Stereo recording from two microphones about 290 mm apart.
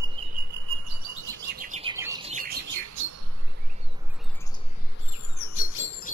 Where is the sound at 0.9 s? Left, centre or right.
Right.